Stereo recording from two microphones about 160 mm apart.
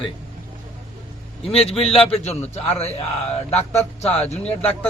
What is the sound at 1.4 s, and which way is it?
A man's voice, 40° left (ahead or behind).